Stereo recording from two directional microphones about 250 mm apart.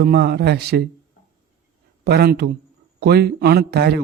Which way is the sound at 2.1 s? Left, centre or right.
Right.